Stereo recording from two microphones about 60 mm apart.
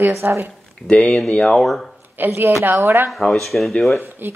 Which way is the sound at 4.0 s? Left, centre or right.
Right.